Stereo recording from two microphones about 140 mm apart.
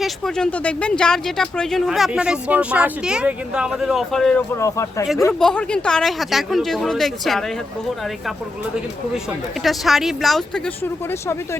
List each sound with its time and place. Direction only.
0.0 s speech: 5° left (ahead or behind)
4.5 s speech: 20° left (ahead or behind)
5.3 s speech: 5° left (ahead or behind)
9.6 s speech: centre (ahead or behind)